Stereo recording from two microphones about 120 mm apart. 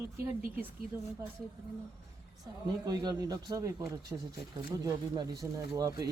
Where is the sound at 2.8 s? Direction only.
35° right (ahead or behind).